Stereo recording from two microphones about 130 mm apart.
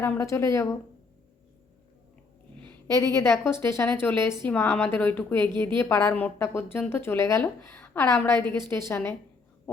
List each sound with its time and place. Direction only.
0.0 s a woman's voice: 20° left (ahead or behind)
2.8 s a woman's voice: 25° left (ahead or behind)